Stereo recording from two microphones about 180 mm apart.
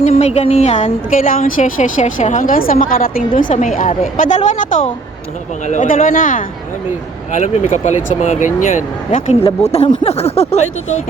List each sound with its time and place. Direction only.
0.0 s a woman's voice: 40° left (ahead or behind)